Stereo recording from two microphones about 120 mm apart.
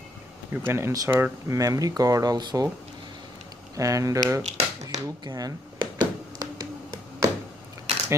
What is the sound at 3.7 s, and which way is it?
Speech, 25° right (ahead or behind).